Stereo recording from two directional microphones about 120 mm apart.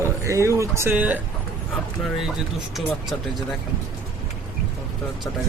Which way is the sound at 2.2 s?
Centre (ahead or behind).